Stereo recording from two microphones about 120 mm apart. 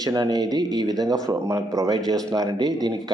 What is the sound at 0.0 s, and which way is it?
Speech, 35° right (ahead or behind).